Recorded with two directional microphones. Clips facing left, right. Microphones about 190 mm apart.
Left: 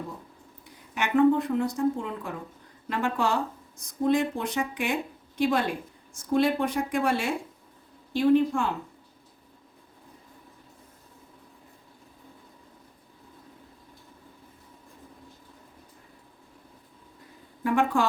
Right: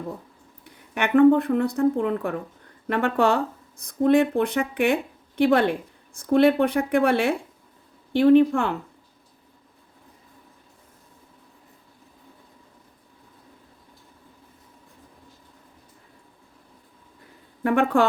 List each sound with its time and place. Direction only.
0.9 s speech: 60° right (ahead or behind)
17.6 s speech: 60° right (ahead or behind)